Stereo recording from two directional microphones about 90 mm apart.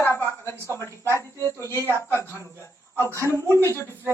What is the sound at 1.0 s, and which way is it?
Speech, 30° right (ahead or behind).